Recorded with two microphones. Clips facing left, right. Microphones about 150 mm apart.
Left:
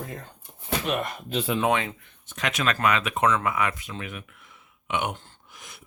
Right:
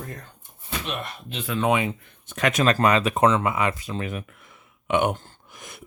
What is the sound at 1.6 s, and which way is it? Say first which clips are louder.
Speech: right 5 dB; 10° right (ahead or behind).